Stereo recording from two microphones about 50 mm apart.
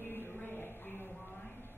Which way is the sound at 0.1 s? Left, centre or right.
Left.